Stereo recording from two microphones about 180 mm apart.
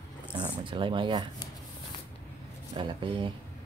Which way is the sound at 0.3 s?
25° right (ahead or behind).